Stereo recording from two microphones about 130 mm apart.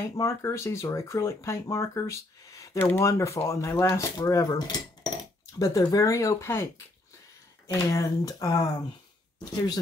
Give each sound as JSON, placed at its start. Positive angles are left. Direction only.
{"t": 0.2, "sound": "cutlery", "side_deg": 25}
{"t": 9.4, "sound": "speech", "side_deg": 30}